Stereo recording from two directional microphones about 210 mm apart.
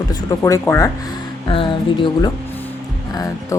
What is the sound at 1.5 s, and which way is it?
Speech, 25° left (ahead or behind).